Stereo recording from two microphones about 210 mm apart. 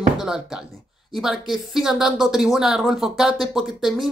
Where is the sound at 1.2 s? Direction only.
Centre (ahead or behind).